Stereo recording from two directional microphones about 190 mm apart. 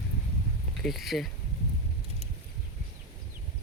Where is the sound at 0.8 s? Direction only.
Centre (ahead or behind).